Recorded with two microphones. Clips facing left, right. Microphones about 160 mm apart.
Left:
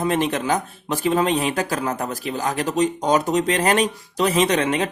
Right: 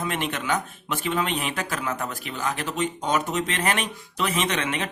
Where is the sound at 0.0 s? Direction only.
35° left (ahead or behind).